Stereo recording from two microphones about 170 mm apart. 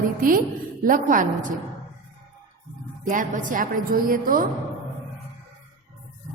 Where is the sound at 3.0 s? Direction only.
50° right (ahead or behind).